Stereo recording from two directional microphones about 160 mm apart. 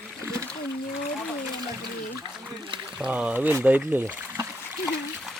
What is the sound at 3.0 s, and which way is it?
Speech, 10° right (ahead or behind).